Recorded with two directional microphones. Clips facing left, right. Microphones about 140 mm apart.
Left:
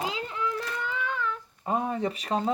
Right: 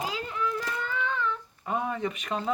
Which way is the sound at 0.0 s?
20° left (ahead or behind).